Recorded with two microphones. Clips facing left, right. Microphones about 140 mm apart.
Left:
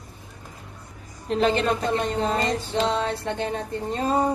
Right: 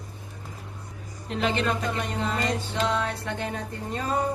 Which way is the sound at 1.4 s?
35° left (ahead or behind).